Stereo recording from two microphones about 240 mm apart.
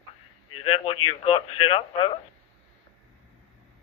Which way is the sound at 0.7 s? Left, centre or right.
Left.